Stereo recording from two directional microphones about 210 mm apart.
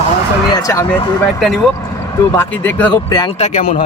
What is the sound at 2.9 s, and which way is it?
Speech, 20° left (ahead or behind).